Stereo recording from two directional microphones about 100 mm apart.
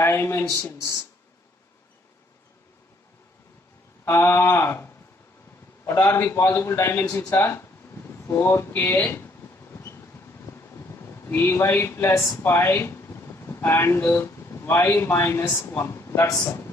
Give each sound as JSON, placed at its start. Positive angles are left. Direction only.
{"t": 0.0, "sound": "a man's voice", "side_deg": 25}
{"t": 4.0, "sound": "a man's voice", "side_deg": 25}
{"t": 9.7, "sound": "vehicle", "side_deg": 25}
{"t": 11.0, "sound": "a man's voice", "side_deg": 25}